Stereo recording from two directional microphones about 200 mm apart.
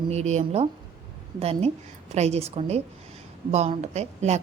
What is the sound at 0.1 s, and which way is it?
A woman's voice, 35° right (ahead or behind).